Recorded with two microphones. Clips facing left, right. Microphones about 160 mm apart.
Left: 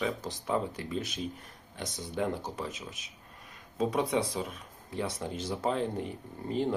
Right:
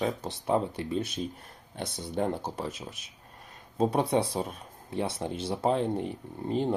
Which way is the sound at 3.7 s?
30° right (ahead or behind).